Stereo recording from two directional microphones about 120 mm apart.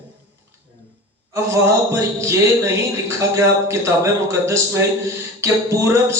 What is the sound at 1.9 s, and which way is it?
A man's voice, 25° right (ahead or behind).